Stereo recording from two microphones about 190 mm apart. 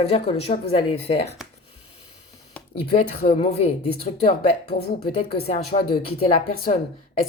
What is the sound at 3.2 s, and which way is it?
Speech, 35° left (ahead or behind).